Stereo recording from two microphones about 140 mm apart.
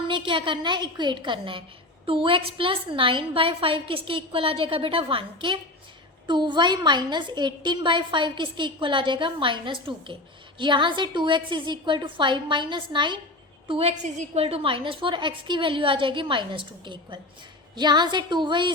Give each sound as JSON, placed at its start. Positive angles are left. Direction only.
{"t": 0.1, "sound": "a woman's voice", "side_deg": -35}
{"t": 13.7, "sound": "a woman's voice", "side_deg": -45}